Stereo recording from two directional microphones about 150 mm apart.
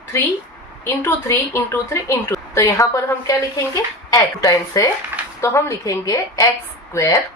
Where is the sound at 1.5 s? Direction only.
20° left (ahead or behind).